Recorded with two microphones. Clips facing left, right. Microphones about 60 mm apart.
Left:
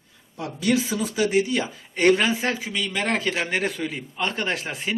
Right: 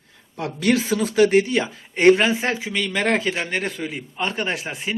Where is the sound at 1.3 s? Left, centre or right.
Right.